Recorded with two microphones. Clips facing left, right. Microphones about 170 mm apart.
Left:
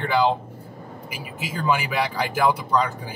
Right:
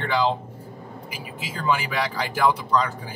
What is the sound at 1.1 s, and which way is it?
Speech, 10° left (ahead or behind).